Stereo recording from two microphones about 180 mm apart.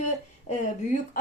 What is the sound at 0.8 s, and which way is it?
Speech, 40° left (ahead or behind).